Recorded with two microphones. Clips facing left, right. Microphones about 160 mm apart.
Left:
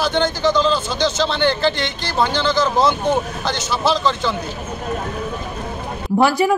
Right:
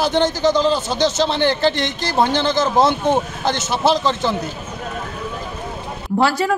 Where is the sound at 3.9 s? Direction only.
20° right (ahead or behind).